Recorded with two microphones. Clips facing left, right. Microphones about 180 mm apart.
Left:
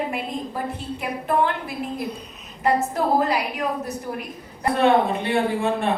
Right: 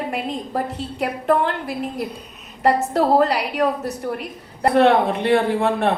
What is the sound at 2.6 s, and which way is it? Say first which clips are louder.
A woman's voice: right 3 dB; 70° right (ahead or behind).